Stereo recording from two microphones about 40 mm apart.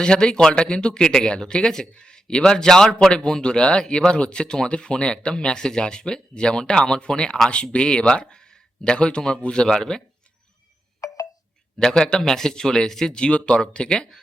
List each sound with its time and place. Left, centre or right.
0.0 s speech: left
11.8 s a man's voice: centre
13.1 s speech: left